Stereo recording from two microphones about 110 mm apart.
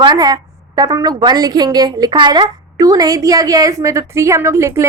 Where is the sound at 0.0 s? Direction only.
40° right (ahead or behind).